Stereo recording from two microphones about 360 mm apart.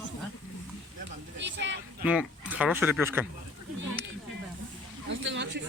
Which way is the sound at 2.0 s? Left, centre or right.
Centre.